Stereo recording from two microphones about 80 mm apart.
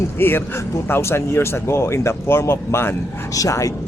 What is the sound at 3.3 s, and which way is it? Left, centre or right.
Speech, left.